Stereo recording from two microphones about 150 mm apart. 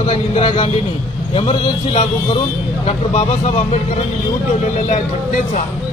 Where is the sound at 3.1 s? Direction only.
45° left (ahead or behind).